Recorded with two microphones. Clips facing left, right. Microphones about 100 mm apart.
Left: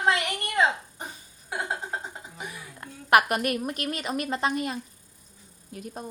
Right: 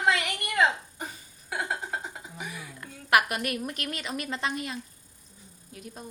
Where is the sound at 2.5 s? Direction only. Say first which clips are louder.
Even; 35° left (ahead or behind).